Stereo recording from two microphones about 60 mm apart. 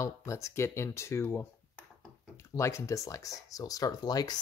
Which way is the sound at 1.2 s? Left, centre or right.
Left.